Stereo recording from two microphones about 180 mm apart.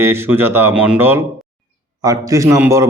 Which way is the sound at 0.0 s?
15° right (ahead or behind).